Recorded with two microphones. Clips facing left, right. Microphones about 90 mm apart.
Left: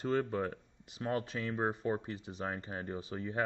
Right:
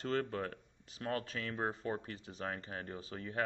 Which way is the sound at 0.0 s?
15° left (ahead or behind).